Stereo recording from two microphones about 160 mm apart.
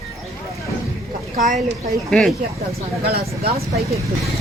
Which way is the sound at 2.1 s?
Centre (ahead or behind).